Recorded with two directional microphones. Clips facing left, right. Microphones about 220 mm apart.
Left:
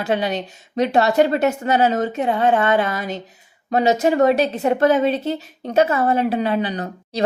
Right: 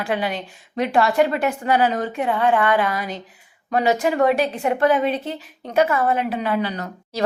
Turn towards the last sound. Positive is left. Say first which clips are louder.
# left 3 dB
turn(degrees=20)  # may be behind; listen again after turning